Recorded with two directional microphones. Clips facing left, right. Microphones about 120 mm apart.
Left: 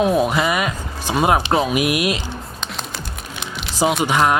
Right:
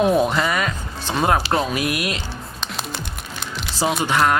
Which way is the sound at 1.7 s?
15° left (ahead or behind).